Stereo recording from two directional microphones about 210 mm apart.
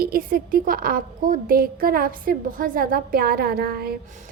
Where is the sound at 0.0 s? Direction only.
45° right (ahead or behind).